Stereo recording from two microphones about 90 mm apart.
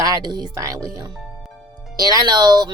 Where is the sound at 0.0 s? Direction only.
50° right (ahead or behind).